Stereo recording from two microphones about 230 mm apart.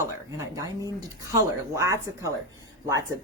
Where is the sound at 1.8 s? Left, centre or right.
Centre.